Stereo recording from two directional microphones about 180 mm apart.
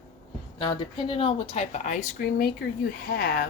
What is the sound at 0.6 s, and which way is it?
A woman's voice, 25° left (ahead or behind).